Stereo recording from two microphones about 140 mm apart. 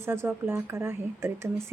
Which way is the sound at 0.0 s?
15° right (ahead or behind).